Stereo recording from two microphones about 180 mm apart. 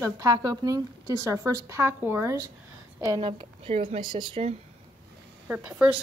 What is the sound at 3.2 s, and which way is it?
A woman's voice, 30° right (ahead or behind).